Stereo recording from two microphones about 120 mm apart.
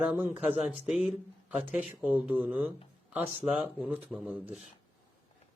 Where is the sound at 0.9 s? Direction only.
5° right (ahead or behind).